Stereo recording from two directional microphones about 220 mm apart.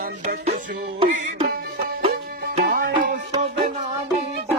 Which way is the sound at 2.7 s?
45° right (ahead or behind).